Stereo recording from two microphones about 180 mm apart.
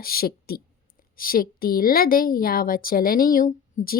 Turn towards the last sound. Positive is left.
turn(degrees=45)  # may be behind; listen again after turning